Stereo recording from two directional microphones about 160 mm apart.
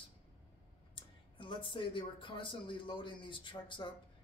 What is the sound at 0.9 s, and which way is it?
Speech, 30° left (ahead or behind).